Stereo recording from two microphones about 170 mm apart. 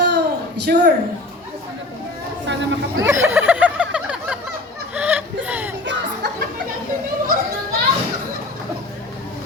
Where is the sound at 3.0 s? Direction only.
15° right (ahead or behind).